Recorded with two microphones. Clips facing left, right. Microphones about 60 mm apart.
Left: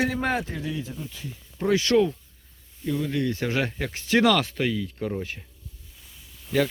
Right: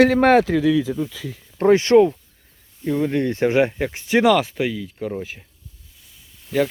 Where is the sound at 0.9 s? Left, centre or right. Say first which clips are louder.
Right 13 dB; right.